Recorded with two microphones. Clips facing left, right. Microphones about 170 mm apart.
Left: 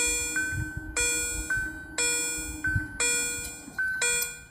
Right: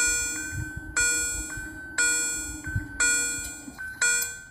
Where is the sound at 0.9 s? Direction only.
15° left (ahead or behind).